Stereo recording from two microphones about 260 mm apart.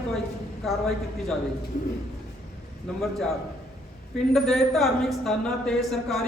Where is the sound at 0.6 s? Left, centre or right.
Centre.